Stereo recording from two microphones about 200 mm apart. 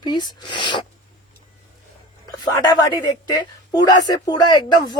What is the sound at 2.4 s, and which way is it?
A woman's voice, 20° left (ahead or behind).